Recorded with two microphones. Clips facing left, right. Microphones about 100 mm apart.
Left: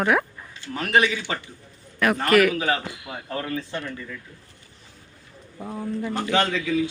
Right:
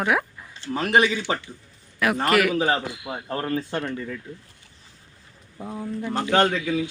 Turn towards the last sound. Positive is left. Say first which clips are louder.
# right 2 dB
turn(degrees=-45)  # may be behind; listen again after turning